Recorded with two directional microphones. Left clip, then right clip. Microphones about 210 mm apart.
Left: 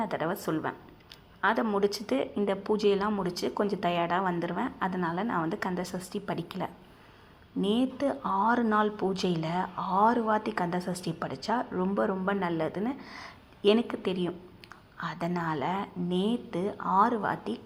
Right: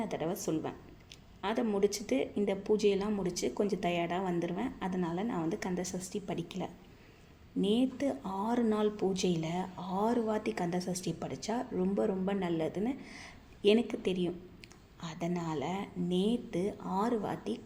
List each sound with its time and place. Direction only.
0.1 s a woman's voice: 5° left (ahead or behind)
7.6 s a woman's voice: 5° left (ahead or behind)